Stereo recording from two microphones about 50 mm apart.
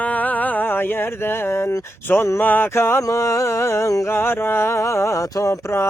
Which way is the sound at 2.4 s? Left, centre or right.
Left.